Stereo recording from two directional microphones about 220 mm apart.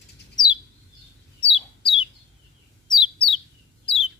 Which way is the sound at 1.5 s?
25° left (ahead or behind).